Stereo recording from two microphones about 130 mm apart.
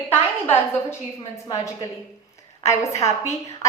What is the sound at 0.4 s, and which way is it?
Speech, 20° left (ahead or behind).